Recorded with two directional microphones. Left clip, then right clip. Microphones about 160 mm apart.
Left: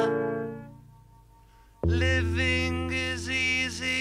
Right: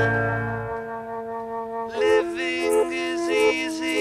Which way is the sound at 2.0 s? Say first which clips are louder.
Right 8 dB; centre (ahead or behind).